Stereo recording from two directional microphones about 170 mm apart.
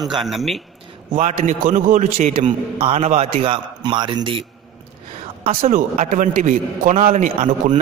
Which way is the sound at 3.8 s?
25° right (ahead or behind).